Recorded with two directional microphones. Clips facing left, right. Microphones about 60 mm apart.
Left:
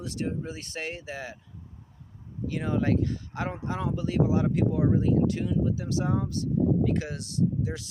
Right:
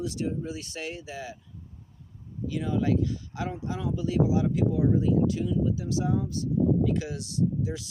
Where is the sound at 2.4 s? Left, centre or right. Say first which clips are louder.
Even; left.